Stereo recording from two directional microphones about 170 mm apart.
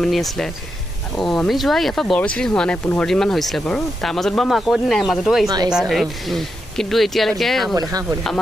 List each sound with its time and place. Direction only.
0.0 s speech: centre (ahead or behind)
7.7 s speech: 20° right (ahead or behind)